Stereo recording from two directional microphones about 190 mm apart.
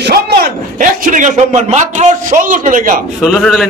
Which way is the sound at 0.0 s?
55° right (ahead or behind).